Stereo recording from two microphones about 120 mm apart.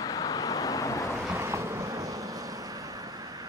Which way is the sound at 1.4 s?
25° right (ahead or behind).